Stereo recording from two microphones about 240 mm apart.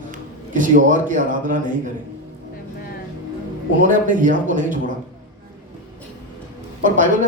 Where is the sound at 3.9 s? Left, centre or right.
Right.